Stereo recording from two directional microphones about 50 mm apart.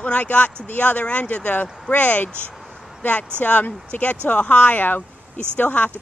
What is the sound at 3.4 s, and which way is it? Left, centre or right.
Speech, left.